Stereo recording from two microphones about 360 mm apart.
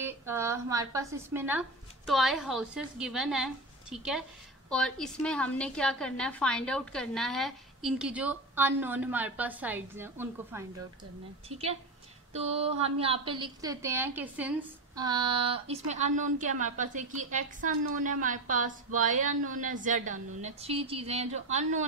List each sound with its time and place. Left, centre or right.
0.0 s a woman's voice: centre
11.4 s a woman's voice: centre